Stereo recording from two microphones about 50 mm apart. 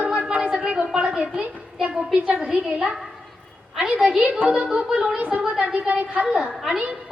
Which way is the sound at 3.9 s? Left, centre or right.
Centre.